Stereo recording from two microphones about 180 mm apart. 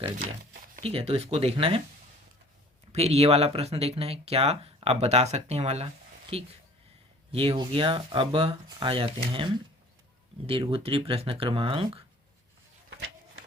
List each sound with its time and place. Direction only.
0.8 s speech: 30° right (ahead or behind)
2.9 s speech: 35° right (ahead or behind)
12.9 s a sound: 90° right